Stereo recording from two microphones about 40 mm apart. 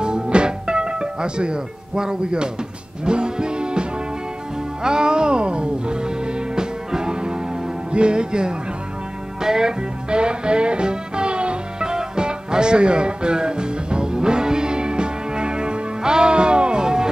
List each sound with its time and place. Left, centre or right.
0.0 s music: right
4.8 s music: centre